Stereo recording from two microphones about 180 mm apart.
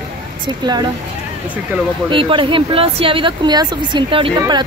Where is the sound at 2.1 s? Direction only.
30° right (ahead or behind).